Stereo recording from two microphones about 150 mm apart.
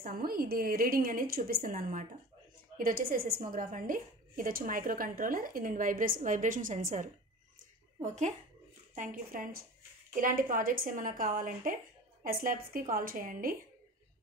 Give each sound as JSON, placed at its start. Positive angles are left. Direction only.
{"t": 0.0, "sound": "a woman's voice", "side_deg": -75}
{"t": 8.9, "sound": "a woman's voice", "side_deg": -65}